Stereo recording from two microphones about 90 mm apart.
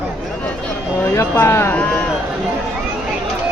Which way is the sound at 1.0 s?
30° left (ahead or behind).